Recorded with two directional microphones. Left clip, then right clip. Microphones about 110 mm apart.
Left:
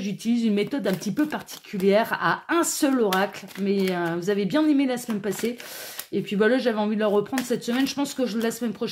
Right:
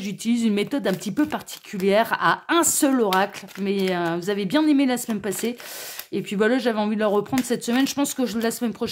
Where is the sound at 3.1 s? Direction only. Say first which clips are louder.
Right 3 dB; 25° right (ahead or behind).